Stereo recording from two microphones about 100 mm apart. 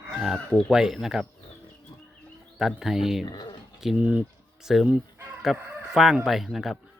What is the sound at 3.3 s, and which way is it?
Speech, 45° left (ahead or behind).